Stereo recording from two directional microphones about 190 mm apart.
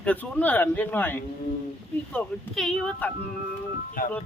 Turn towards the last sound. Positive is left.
turn(degrees=50)  # may be behind; listen again after turning